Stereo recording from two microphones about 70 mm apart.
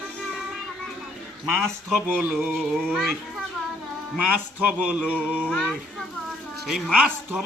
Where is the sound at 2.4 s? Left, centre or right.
Centre.